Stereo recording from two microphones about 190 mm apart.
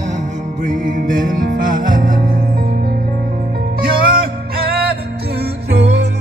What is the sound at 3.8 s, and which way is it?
Music, 50° right (ahead or behind).